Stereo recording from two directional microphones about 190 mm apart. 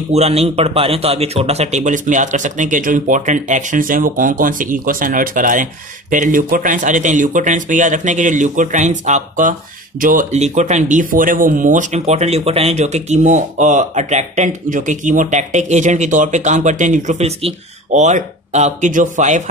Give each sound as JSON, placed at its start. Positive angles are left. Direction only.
{"t": 0.1, "sound": "a man's voice", "side_deg": -35}